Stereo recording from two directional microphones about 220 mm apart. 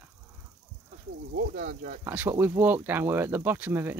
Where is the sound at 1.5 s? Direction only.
35° right (ahead or behind).